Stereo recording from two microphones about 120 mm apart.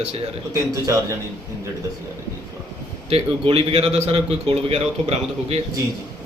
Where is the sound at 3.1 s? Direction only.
55° right (ahead or behind).